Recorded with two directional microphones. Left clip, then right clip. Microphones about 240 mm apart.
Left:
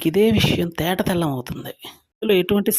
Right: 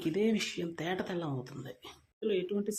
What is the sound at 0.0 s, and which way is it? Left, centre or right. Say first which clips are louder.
Speech: left 14 dB; left.